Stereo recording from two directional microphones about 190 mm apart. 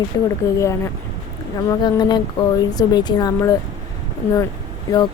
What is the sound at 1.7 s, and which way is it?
A woman's voice, 20° left (ahead or behind).